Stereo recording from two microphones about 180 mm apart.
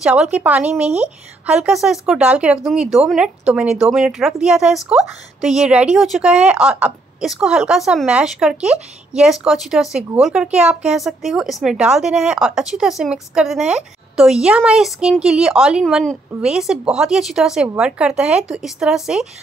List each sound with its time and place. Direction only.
0.0 s speech: 5° right (ahead or behind)